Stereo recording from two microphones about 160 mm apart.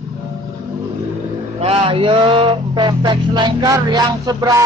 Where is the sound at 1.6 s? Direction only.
35° right (ahead or behind).